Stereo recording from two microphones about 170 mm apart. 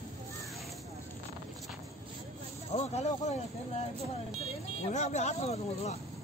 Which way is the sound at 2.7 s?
40° left (ahead or behind).